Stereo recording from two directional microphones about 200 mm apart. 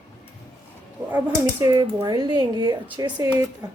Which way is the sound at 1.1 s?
15° right (ahead or behind).